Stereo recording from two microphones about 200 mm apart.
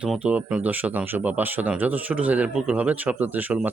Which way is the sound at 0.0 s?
5° right (ahead or behind).